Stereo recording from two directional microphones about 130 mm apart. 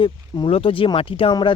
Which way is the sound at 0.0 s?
40° left (ahead or behind).